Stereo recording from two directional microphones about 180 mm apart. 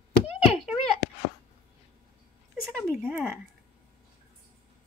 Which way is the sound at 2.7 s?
Centre (ahead or behind).